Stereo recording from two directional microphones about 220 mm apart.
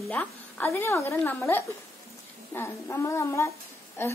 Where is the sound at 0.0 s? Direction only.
5° left (ahead or behind).